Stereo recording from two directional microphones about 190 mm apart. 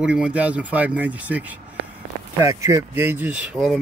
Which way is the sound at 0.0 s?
5° right (ahead or behind).